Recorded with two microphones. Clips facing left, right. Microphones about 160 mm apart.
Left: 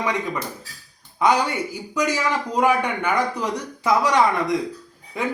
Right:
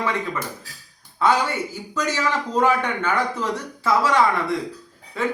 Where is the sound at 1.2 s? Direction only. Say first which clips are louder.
Left 1 dB; 15° left (ahead or behind).